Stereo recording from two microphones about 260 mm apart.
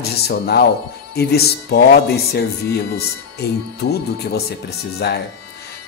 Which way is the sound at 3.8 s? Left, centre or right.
Left.